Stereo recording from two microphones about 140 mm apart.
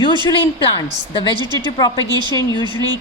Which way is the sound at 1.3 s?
30° right (ahead or behind).